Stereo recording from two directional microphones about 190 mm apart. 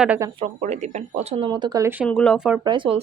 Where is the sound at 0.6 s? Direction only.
35° right (ahead or behind); by 2.1 s 10° right (ahead or behind).